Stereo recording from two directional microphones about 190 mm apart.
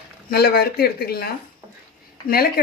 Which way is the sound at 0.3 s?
55° left (ahead or behind).